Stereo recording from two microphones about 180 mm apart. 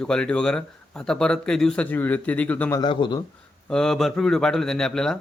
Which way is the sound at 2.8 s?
25° left (ahead or behind).